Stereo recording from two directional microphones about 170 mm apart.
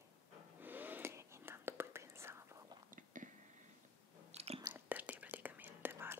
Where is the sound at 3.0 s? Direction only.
50° right (ahead or behind).